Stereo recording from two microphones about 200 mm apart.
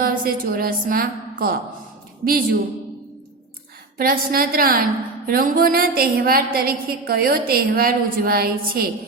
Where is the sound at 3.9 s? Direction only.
50° right (ahead or behind).